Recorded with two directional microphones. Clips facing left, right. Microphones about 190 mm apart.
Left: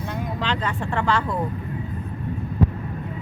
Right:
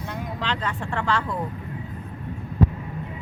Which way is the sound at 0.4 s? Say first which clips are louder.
Left 2 dB; 15° left (ahead or behind).